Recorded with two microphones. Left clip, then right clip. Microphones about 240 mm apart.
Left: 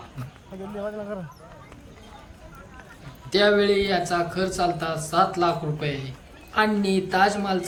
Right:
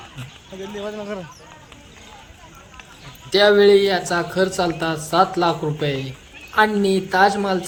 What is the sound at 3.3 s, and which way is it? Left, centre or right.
Speech, centre.